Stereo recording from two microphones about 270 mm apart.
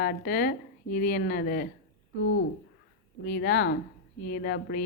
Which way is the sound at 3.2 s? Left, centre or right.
Left.